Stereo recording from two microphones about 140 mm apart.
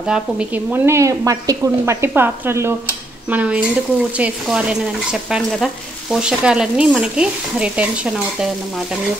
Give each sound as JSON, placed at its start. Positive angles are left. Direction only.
{"t": 0.0, "sound": "a woman's voice", "side_deg": -5}
{"t": 4.2, "sound": "stir", "side_deg": -5}